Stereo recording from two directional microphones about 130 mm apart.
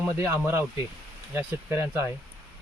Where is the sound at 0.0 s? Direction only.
15° right (ahead or behind).